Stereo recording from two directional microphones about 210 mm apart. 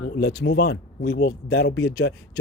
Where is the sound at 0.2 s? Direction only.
55° left (ahead or behind).